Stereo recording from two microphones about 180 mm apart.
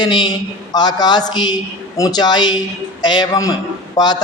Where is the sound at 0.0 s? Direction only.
25° left (ahead or behind).